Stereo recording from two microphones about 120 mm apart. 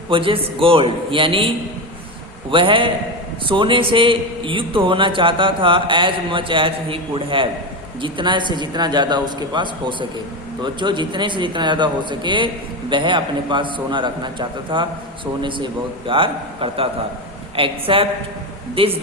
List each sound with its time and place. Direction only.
0.1 s a man's voice: 45° right (ahead or behind)